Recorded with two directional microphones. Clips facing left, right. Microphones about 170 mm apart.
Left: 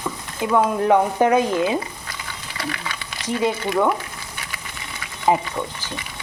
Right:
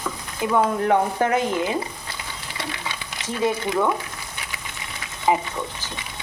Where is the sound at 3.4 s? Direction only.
20° left (ahead or behind).